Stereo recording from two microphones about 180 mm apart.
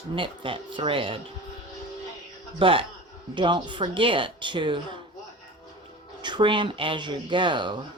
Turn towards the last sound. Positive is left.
turn(degrees=-25)  # may be behind; listen again after turning